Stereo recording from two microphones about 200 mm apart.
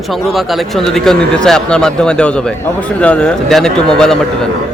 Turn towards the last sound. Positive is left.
turn(degrees=5)  # may be behind; listen again after turning